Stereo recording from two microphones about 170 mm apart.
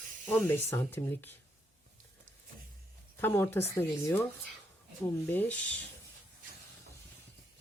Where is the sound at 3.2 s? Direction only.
15° left (ahead or behind).